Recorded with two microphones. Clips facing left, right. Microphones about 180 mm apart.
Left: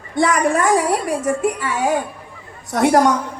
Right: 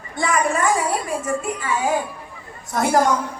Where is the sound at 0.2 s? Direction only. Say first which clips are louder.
Left 4 dB; 70° left (ahead or behind).